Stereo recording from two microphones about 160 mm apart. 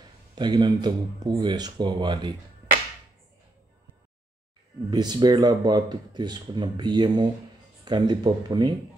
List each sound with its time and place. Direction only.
0.4 s speech: 25° right (ahead or behind)
4.9 s speech: 25° right (ahead or behind)